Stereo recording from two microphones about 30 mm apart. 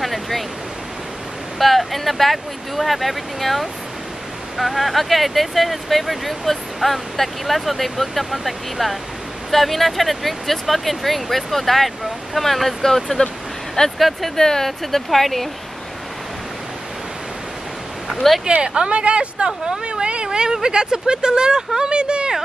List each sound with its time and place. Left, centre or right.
0.0 s a sound: centre
1.6 s speech: centre
14.3 s speech: centre
18.5 s speech: right
20.2 s speech: right